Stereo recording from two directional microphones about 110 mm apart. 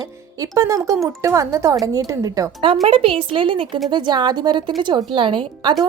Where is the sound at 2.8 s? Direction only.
55° right (ahead or behind).